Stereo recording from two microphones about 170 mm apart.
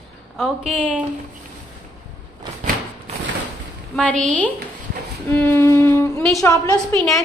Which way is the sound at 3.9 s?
10° left (ahead or behind).